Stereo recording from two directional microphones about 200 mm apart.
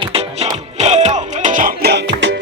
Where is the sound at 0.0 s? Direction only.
30° right (ahead or behind).